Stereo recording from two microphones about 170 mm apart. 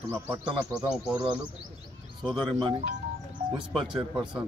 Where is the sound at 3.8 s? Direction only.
30° right (ahead or behind).